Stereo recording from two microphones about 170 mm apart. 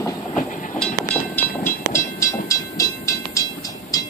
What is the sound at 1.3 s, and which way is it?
Train, 15° left (ahead or behind).